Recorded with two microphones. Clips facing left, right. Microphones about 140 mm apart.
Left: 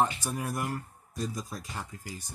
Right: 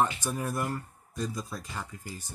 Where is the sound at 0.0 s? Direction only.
10° left (ahead or behind).